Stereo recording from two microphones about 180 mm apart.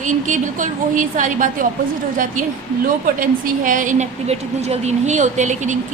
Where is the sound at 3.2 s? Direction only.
45° right (ahead or behind).